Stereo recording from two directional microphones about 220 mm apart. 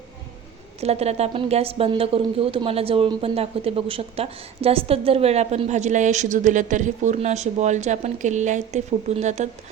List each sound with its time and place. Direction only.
0.8 s a woman's voice: 30° right (ahead or behind)